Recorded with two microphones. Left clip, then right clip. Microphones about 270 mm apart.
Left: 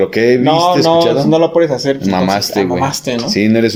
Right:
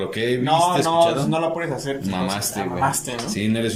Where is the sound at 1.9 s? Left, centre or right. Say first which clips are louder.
Left 12 dB; left.